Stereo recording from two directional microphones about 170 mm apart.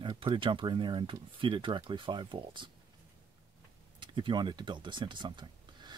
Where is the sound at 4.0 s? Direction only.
30° right (ahead or behind).